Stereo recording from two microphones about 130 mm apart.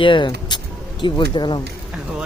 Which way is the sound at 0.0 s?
40° left (ahead or behind).